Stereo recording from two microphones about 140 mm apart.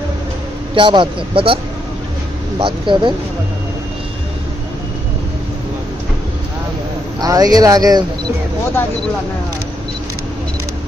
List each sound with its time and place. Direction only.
0.7 s a man's voice: 35° right (ahead or behind)
2.6 s a man's voice: 35° right (ahead or behind)
7.2 s speech: 25° right (ahead or behind)